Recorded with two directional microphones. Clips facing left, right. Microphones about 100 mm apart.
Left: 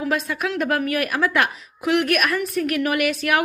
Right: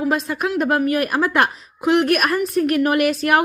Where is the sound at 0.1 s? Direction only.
35° right (ahead or behind).